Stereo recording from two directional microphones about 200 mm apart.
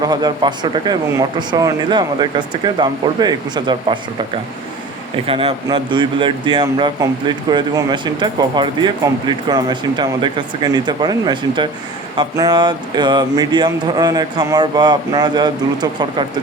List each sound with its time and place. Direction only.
0.0 s speech: 20° right (ahead or behind)
5.2 s speech: 25° right (ahead or behind)